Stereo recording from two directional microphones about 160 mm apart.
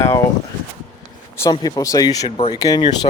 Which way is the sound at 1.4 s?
25° left (ahead or behind).